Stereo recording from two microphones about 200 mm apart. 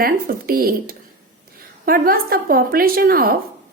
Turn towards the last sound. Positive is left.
turn(degrees=-45)  # may be behind; listen again after turning